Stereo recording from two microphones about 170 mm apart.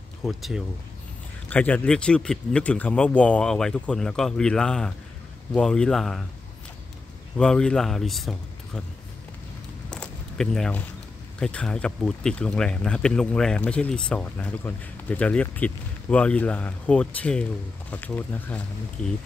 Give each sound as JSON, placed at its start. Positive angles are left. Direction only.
{"t": 0.2, "sound": "speech", "side_deg": 0}
{"t": 7.3, "sound": "speech", "side_deg": 5}
{"t": 9.9, "sound": "walk", "side_deg": 5}
{"t": 11.3, "sound": "speech", "side_deg": 5}